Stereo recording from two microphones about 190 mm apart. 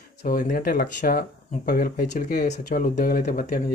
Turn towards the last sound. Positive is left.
turn(degrees=50)  # may be behind; listen again after turning